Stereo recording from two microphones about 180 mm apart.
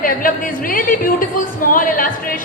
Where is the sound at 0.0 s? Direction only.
50° left (ahead or behind).